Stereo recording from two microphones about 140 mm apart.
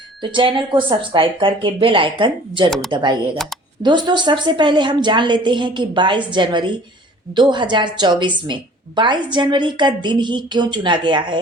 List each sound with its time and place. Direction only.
0.2 s a woman's voice: 35° right (ahead or behind)
2.6 s speech: 5° left (ahead or behind)
2.9 s a woman's voice: 30° right (ahead or behind)